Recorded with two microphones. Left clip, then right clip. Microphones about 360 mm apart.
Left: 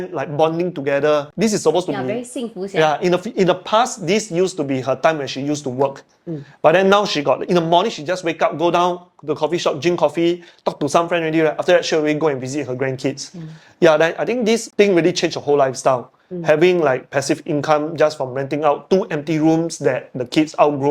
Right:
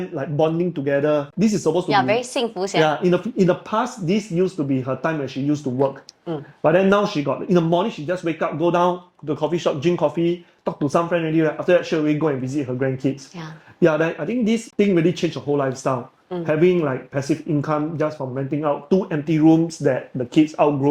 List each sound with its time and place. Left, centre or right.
0.1 s speech: left
1.9 s a woman's voice: right
2.7 s speech: left
18.6 s speech: left